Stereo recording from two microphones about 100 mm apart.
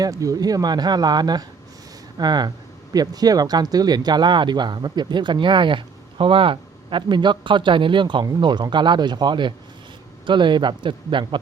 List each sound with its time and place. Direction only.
0.0 s speech: 35° right (ahead or behind); by 11.3 s 55° right (ahead or behind)